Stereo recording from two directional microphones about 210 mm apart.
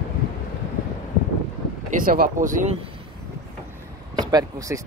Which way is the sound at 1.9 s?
45° right (ahead or behind).